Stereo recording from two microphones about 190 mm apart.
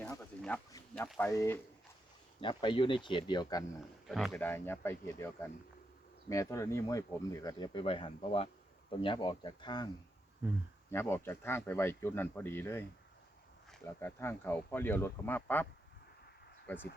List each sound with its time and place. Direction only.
0.0 s a sound: 5° left (ahead or behind)
0.9 s speech: centre (ahead or behind)
1.3 s speech: 15° left (ahead or behind)
4.0 s speech: centre (ahead or behind); by 9.9 s 20° left (ahead or behind)
10.9 s speech: 10° left (ahead or behind)
13.8 s speech: 15° left (ahead or behind)
16.7 s speech: 10° left (ahead or behind)